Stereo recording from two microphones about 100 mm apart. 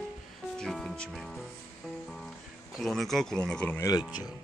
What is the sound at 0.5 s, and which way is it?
Music, 5° left (ahead or behind).